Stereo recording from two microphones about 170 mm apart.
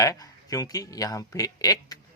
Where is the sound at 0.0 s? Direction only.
20° left (ahead or behind).